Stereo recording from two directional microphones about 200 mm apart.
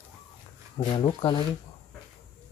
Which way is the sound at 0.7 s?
30° left (ahead or behind).